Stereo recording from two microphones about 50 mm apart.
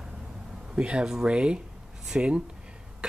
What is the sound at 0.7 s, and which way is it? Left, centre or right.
Speech, centre.